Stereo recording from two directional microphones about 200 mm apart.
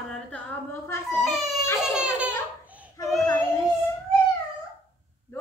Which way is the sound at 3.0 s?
20° left (ahead or behind).